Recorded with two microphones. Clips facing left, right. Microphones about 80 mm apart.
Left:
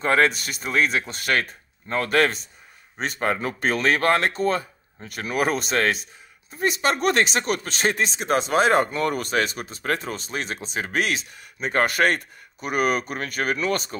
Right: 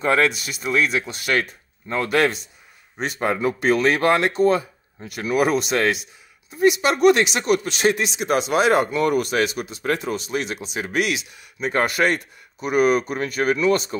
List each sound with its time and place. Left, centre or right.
0.0 s speech: left